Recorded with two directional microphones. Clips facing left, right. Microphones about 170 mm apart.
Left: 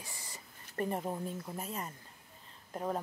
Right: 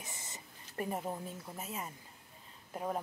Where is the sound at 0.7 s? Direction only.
5° right (ahead or behind).